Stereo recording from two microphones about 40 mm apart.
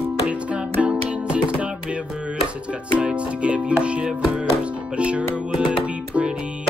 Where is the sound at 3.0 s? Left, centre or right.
Right.